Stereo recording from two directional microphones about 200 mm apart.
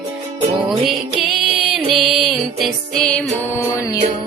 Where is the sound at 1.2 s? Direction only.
Centre (ahead or behind).